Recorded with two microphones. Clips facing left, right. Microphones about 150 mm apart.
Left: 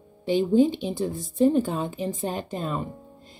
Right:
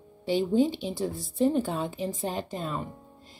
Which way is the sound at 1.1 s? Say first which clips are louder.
Left 5 dB; 50° left (ahead or behind).